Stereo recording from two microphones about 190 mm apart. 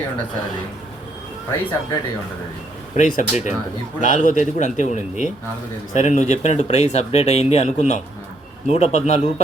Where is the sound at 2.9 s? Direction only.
40° left (ahead or behind).